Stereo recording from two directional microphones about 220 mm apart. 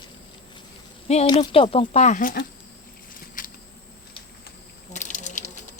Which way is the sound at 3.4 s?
40° left (ahead or behind).